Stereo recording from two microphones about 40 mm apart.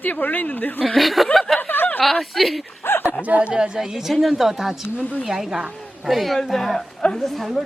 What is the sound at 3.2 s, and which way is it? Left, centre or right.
Speech, right.